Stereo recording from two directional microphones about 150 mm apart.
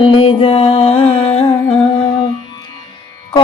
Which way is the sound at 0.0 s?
35° left (ahead or behind).